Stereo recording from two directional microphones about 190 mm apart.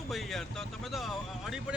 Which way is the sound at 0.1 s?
Centre (ahead or behind).